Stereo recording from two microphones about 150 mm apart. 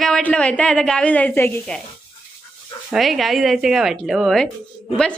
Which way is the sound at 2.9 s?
Centre (ahead or behind).